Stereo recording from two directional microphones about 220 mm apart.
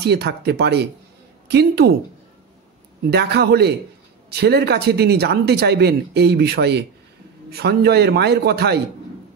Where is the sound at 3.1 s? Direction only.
50° right (ahead or behind).